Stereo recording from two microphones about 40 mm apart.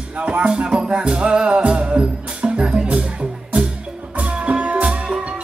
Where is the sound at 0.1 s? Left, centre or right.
Right.